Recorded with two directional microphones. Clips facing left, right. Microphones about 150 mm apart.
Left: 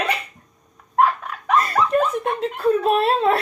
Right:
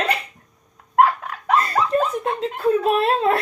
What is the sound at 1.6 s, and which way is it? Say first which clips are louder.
Snicker: left 1 dB; 30° right (ahead or behind).